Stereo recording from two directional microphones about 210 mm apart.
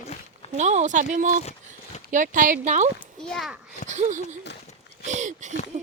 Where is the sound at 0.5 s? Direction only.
35° right (ahead or behind).